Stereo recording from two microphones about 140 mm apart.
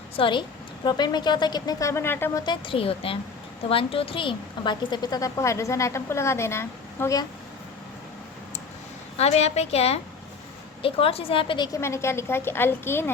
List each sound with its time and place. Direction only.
0.2 s a woman's voice: 35° left (ahead or behind); by 2.4 s 15° left (ahead or behind)
2.4 s a woman's voice: 35° left (ahead or behind)
9.1 s a woman's voice: 50° left (ahead or behind); by 11.8 s 30° left (ahead or behind)
11.8 s a woman's voice: 20° left (ahead or behind)